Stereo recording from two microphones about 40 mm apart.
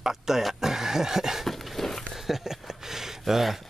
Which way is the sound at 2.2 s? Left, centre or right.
Centre.